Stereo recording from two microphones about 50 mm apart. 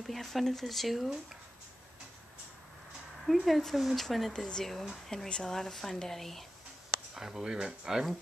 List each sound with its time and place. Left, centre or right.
0.0 s speech: centre
3.3 s speech: centre
4.3 s speech: centre
7.2 s speech: centre